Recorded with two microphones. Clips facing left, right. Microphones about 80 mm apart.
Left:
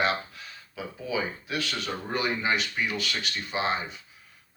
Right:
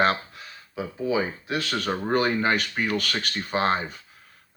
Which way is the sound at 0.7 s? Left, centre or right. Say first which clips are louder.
Right 6 dB; right.